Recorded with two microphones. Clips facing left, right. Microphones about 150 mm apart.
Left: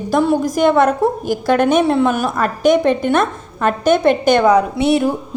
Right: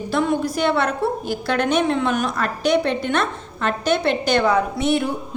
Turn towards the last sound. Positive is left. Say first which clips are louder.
# left 5 dB
turn(degrees=40)  # may be behind; listen again after turning